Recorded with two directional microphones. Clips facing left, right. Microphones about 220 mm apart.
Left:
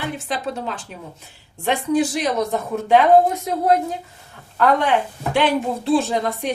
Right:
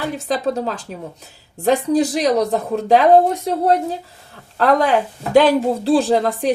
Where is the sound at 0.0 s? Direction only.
40° right (ahead or behind).